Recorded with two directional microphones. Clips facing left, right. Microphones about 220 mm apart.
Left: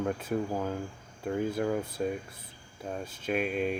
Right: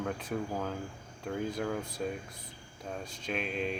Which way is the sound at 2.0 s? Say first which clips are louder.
Left 4 dB; 5° left (ahead or behind).